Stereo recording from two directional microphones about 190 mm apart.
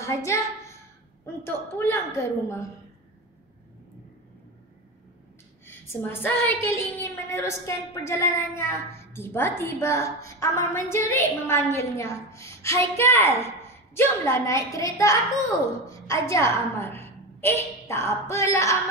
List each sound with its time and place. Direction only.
0.0 s a woman's voice: 15° left (ahead or behind)
5.7 s a woman's voice: 10° left (ahead or behind)